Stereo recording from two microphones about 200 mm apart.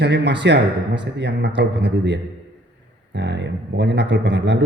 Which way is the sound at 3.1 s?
60° right (ahead or behind).